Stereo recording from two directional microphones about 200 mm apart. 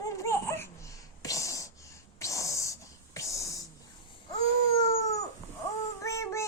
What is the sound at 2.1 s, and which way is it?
Whispering, 15° left (ahead or behind).